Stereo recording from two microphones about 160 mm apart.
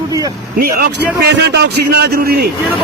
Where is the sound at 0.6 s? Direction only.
75° right (ahead or behind).